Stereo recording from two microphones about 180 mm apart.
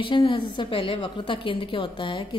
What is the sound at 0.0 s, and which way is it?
A woman's voice, 25° left (ahead or behind).